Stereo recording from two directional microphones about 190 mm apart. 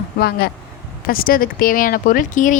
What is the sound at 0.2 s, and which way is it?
A woman's voice, 55° left (ahead or behind).